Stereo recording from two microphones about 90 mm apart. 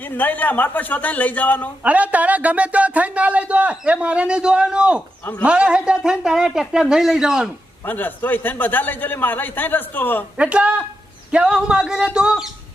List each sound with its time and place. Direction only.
0.0 s a man's voice: 20° left (ahead or behind)
1.8 s speech: 15° right (ahead or behind)
7.9 s a man's voice: 20° left (ahead or behind)
10.3 s speech: 15° right (ahead or behind)